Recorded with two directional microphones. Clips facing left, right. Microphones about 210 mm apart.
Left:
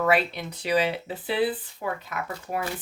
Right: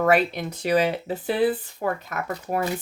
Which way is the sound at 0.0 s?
45° right (ahead or behind).